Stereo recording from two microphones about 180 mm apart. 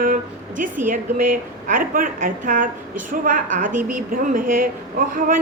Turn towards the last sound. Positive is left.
turn(degrees=-50)  # may be behind; listen again after turning